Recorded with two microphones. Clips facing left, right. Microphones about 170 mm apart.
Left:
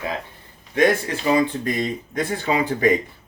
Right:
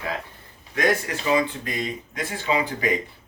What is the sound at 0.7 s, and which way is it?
Speech, 30° left (ahead or behind).